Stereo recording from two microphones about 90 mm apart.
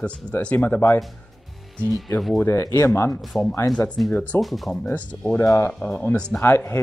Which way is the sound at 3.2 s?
Centre (ahead or behind).